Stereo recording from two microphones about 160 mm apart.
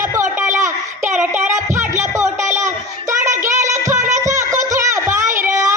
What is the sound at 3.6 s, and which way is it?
Music, 20° right (ahead or behind).